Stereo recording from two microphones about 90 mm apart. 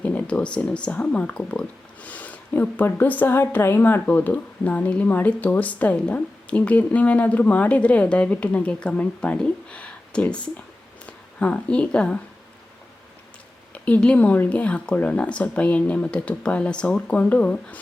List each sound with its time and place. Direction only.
0.0 s speech: 15° left (ahead or behind)
13.7 s speech: 15° left (ahead or behind)